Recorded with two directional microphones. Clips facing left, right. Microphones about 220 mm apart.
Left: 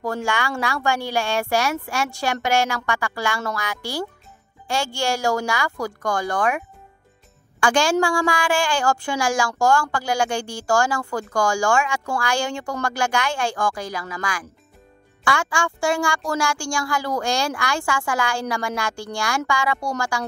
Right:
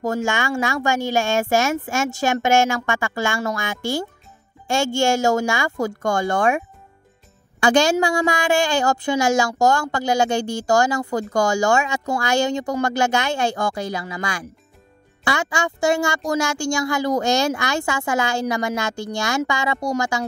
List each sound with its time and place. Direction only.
0.1 s speech: 20° right (ahead or behind)
7.6 s speech: 20° right (ahead or behind)